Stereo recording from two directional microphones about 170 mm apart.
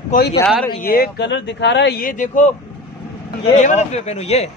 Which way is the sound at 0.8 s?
60° left (ahead or behind).